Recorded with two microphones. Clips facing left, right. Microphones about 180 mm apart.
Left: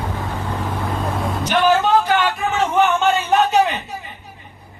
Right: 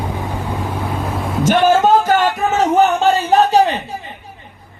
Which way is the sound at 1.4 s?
45° right (ahead or behind).